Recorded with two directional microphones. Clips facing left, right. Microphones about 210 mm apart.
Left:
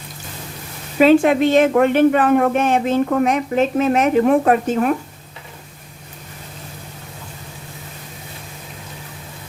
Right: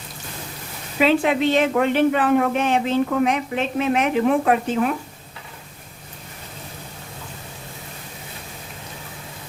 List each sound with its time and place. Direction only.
0.9 s a woman's voice: 45° left (ahead or behind)